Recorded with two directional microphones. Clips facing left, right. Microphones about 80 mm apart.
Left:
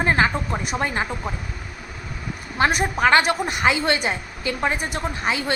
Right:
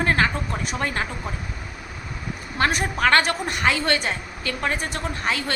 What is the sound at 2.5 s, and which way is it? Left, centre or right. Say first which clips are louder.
A woman's voice: left 3 dB; centre.